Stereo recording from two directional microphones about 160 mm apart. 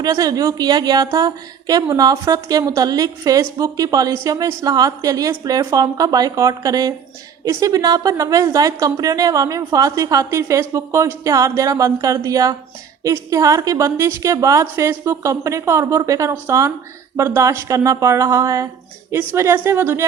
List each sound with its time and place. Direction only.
0.0 s a woman's voice: 20° right (ahead or behind)